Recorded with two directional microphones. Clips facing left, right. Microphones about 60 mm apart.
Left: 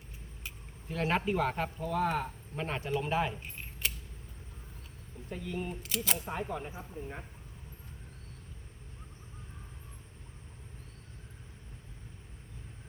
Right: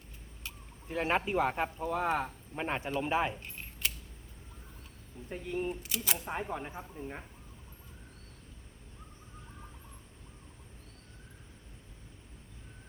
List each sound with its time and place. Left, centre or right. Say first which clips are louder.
0.9 s speech: even; centre
3.4 s keys jangling: even; centre
5.3 s speech: right 3 dB; right
5.8 s speech: left 1 dB; centre
6.2 s speech: even; centre